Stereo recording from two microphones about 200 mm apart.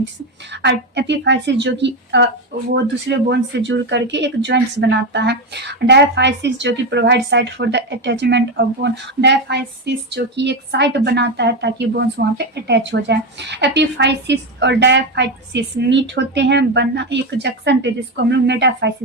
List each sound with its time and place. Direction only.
0.5 s speech: 60° right (ahead or behind)